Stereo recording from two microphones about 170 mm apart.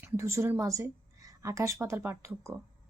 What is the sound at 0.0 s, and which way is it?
A woman's voice, 15° right (ahead or behind).